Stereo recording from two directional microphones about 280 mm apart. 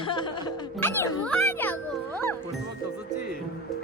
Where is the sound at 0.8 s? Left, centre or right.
Centre.